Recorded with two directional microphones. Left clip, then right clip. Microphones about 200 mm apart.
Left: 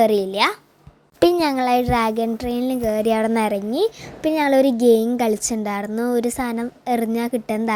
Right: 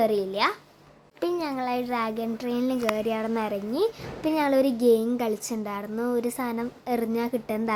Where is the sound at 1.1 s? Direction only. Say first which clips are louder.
Left 11 dB; 40° left (ahead or behind).